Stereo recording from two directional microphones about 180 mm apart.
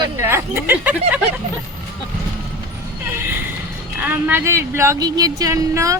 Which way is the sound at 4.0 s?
10° right (ahead or behind).